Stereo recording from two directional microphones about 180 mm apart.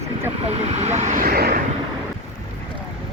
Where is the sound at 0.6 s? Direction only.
40° right (ahead or behind).